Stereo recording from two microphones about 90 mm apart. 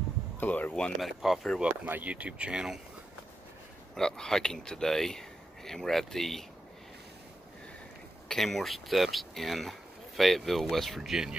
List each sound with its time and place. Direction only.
0.4 s speech: 20° left (ahead or behind)
1.0 s speech: centre (ahead or behind)
1.6 s speech: 15° right (ahead or behind)
3.9 s speech: 5° left (ahead or behind)
8.3 s speech: 5° left (ahead or behind)